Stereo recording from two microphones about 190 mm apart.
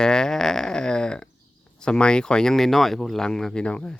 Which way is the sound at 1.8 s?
5° left (ahead or behind).